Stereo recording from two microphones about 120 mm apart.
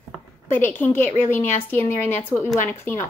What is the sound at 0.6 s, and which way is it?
A woman's voice, 15° left (ahead or behind).